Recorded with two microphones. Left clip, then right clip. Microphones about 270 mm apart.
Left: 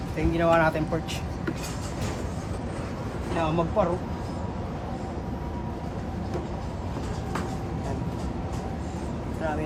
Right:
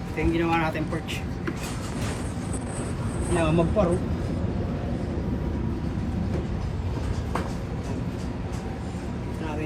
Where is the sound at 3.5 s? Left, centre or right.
Right.